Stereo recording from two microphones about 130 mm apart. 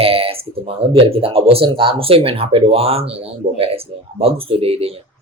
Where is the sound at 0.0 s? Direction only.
45° right (ahead or behind).